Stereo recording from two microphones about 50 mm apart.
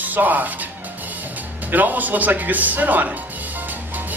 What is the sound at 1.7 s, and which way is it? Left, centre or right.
Speech, right.